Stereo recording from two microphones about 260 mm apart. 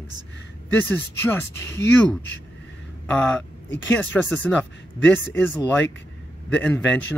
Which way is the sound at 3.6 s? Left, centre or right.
Left.